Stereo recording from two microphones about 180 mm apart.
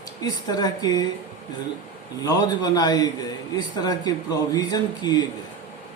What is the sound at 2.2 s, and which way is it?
Speech, 20° left (ahead or behind).